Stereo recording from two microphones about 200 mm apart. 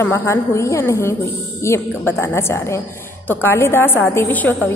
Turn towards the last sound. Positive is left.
turn(degrees=10)  # may be behind; listen again after turning